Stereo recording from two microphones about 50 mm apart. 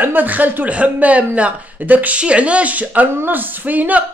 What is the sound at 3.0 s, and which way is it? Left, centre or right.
Speech, right.